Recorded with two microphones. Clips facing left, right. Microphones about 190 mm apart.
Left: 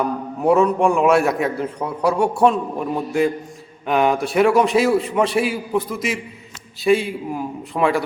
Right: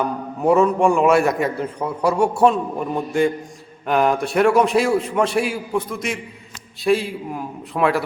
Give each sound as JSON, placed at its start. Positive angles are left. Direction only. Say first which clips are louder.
{"t": 0.0, "sound": "a man's voice", "louder": "left 1 dB", "side_deg": 0}